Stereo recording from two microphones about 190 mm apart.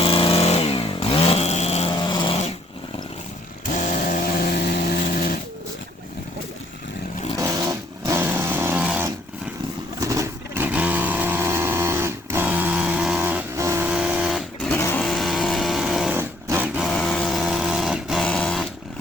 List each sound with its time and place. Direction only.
0.0 s chainsaw: 30° left (ahead or behind)
3.8 s chainsaw: 45° left (ahead or behind)
5.1 s vehicle: 50° left (ahead or behind)
7.3 s vehicle: 15° right (ahead or behind)
16.8 s a sound: centre (ahead or behind)